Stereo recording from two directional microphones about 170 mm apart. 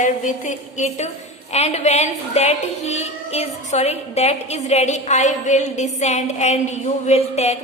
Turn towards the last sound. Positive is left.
turn(degrees=40)  # may be behind; listen again after turning